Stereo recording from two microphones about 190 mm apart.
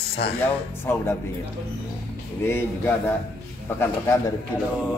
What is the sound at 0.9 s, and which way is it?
Speech, 10° left (ahead or behind).